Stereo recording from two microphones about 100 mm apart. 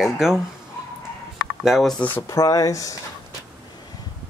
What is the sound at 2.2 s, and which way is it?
Speech, 30° left (ahead or behind).